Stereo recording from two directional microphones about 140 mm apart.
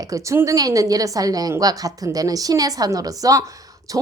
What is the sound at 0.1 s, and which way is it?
A woman's voice, 20° right (ahead or behind).